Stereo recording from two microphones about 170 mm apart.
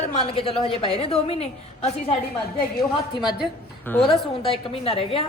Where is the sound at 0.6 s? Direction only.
35° left (ahead or behind).